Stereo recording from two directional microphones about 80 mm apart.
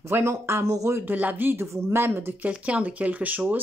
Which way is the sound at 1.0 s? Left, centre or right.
Right.